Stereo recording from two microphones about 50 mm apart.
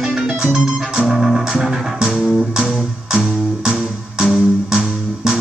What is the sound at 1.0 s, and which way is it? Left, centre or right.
Organ, centre.